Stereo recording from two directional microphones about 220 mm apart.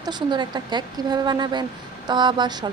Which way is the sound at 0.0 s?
20° right (ahead or behind).